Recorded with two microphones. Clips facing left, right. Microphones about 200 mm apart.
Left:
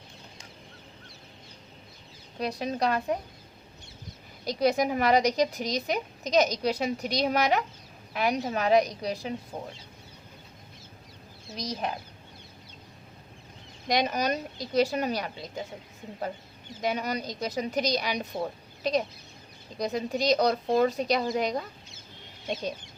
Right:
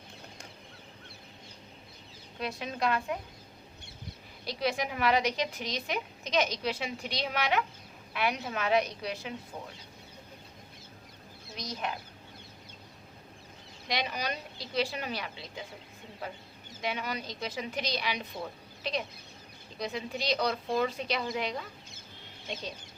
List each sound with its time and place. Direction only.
2.4 s a woman's voice: 40° left (ahead or behind)
4.4 s a woman's voice: 40° left (ahead or behind)
9.5 s speech: 50° left (ahead or behind)
11.5 s a woman's voice: 35° left (ahead or behind)
13.8 s speech: 45° left (ahead or behind)
16.8 s a woman's voice: 40° left (ahead or behind)